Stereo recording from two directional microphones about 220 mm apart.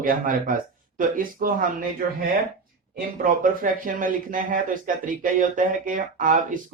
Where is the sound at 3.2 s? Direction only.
40° right (ahead or behind).